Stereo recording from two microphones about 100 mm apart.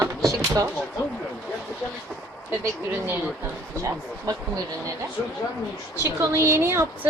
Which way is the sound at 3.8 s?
35° right (ahead or behind).